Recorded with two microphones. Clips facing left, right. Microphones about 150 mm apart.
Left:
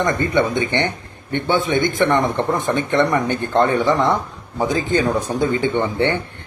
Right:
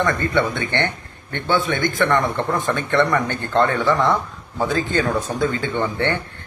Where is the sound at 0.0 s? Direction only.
20° left (ahead or behind).